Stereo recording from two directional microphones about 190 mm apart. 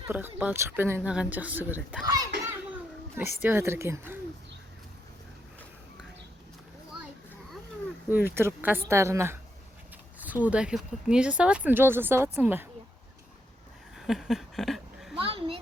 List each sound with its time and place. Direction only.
0.1 s speech: 10° right (ahead or behind)
2.0 s a child's voice: 20° right (ahead or behind)
3.4 s speech: 10° right (ahead or behind)
8.1 s speech: 10° right (ahead or behind)
14.1 s speech: centre (ahead or behind)
15.1 s a child's voice: 30° right (ahead or behind)